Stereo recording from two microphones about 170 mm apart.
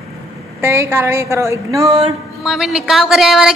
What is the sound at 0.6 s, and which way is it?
A woman's voice, 15° right (ahead or behind).